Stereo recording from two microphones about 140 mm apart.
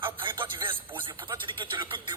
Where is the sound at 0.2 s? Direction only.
35° right (ahead or behind).